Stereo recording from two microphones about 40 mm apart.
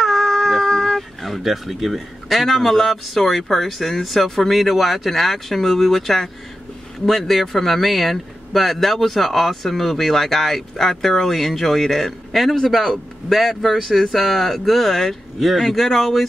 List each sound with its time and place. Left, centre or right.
0.0 s speech: centre